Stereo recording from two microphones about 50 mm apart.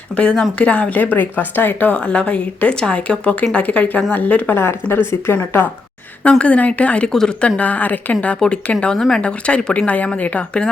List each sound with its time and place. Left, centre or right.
0.2 s speech: centre; by 1.9 s left
1.9 s speech: left
4.5 s speech: left
6.4 s speech: left
7.1 s speech: centre
7.4 s speech: left